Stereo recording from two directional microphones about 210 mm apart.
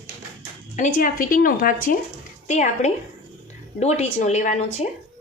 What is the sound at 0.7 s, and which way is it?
A woman's voice, 35° left (ahead or behind).